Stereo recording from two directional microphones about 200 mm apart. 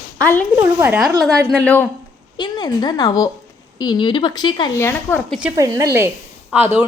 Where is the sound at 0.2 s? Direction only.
10° left (ahead or behind).